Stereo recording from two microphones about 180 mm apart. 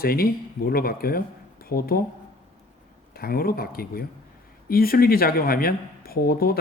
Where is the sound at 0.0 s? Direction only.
55° left (ahead or behind).